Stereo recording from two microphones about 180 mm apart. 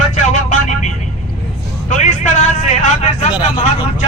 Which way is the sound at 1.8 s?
45° left (ahead or behind).